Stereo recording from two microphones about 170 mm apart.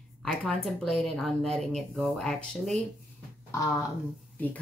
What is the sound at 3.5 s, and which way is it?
Speech, 15° left (ahead or behind).